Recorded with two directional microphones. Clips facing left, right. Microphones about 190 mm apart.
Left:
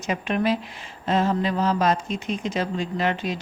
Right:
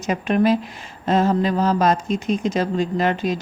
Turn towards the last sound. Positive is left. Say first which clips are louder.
# right 4 dB
turn(degrees=-40)  # may be behind; listen again after turning